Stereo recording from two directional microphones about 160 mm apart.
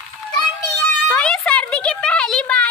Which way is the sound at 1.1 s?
5° left (ahead or behind).